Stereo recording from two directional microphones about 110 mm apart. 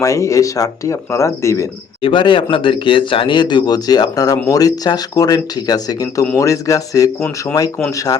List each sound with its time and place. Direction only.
0.0 s speech: 30° left (ahead or behind)
2.0 s speech: 50° left (ahead or behind); by 8.2 s 30° left (ahead or behind)